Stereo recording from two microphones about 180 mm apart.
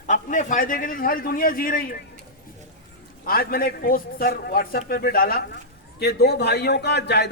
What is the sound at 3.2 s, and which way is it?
A man's voice, 55° left (ahead or behind).